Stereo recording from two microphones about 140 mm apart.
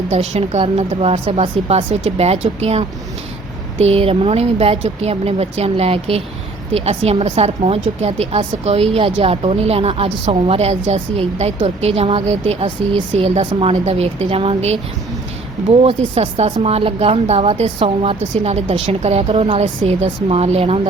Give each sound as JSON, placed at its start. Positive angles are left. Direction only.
{"t": 0.1, "sound": "a woman's voice", "side_deg": -50}